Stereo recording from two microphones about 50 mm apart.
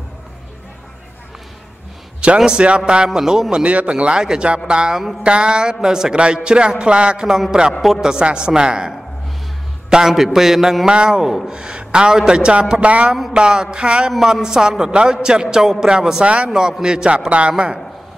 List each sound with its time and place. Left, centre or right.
2.2 s a man's voice: centre
3.1 s a man's voice: centre
3.6 s a man's voice: right